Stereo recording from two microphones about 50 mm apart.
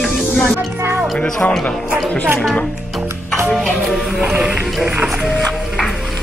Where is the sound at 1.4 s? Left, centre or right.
Left.